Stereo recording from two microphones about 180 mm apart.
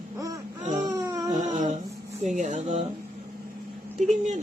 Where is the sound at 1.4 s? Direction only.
45° right (ahead or behind).